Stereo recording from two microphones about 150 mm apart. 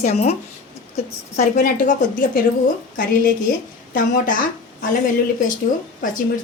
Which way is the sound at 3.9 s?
65° left (ahead or behind).